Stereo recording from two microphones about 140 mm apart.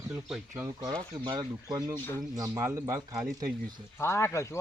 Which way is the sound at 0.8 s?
30° right (ahead or behind).